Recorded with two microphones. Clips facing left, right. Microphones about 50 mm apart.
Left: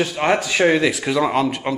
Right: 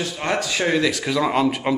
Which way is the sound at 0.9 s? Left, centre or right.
Centre.